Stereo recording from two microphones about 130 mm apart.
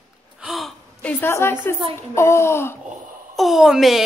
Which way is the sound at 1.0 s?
15° left (ahead or behind).